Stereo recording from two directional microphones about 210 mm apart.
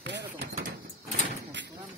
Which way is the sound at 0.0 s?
55° right (ahead or behind).